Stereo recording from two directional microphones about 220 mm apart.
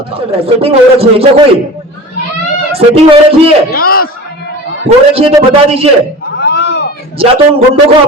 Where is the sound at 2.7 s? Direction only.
25° right (ahead or behind).